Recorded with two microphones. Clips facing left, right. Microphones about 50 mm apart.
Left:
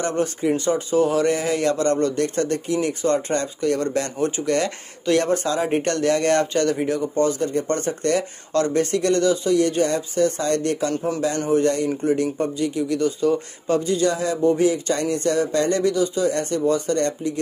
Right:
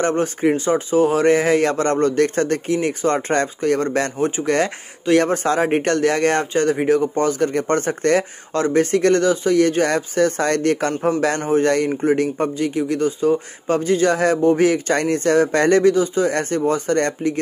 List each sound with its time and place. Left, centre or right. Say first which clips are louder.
0.0 s a man's voice: right 4 dB; right
0.7 s a man's voice: right 1 dB; right
6.4 s speech: right 2 dB; right
6.8 s a man's voice: right 4 dB; right
11.3 s a man's voice: right 1 dB; right
12.0 s speech: right 3 dB; right
13.0 s speech: right 2 dB; right
13.7 s speech: right 3 dB; right